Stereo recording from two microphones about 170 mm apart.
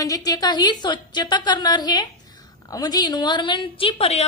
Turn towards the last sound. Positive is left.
turn(degrees=35)  # may be behind; listen again after turning